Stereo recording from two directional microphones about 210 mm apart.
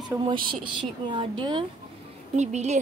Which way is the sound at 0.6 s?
25° right (ahead or behind).